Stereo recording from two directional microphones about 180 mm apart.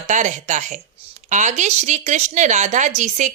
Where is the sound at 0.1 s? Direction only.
40° right (ahead or behind).